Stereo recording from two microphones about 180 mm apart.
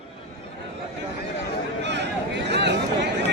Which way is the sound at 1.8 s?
75° right (ahead or behind).